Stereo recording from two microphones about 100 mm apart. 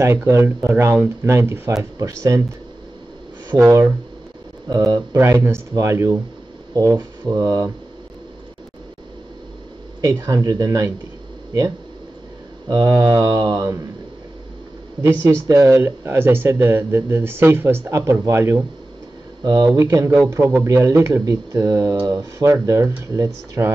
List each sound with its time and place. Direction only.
0.0 s speech: 25° right (ahead or behind)
4.6 s speech: 40° right (ahead or behind)
5.1 s speech: 25° right (ahead or behind)
10.0 s speech: 35° right (ahead or behind)
12.6 s speech: 35° right (ahead or behind)
15.2 s speech: 35° right (ahead or behind)
19.4 s speech: 40° right (ahead or behind)